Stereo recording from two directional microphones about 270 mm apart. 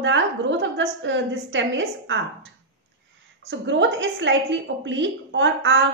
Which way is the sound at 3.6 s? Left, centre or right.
Right.